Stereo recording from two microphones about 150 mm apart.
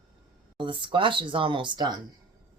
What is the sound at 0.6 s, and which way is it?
Speech, 35° right (ahead or behind).